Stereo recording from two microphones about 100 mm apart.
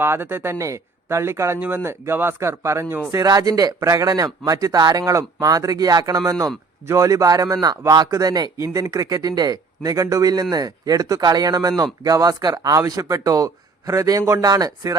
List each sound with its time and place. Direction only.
0.0 s speech: 25° right (ahead or behind); by 14.9 s 40° right (ahead or behind)